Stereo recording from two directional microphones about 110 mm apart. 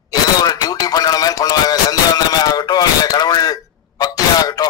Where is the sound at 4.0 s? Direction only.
35° left (ahead or behind).